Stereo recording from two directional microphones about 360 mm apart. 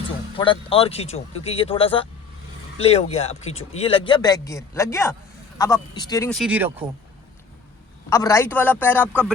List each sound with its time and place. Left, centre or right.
0.3 s speech: centre
8.1 s speech: centre